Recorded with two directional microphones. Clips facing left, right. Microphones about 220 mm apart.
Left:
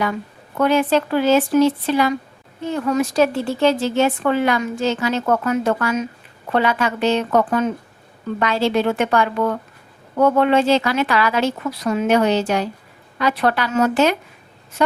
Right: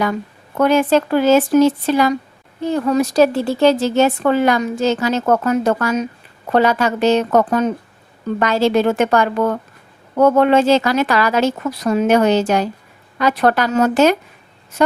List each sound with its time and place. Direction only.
0.5 s speech: 45° right (ahead or behind)